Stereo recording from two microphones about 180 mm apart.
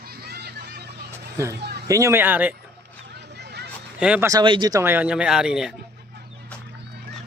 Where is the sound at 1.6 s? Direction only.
60° right (ahead or behind).